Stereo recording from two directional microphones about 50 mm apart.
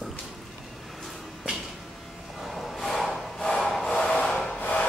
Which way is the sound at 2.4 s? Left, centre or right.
Centre.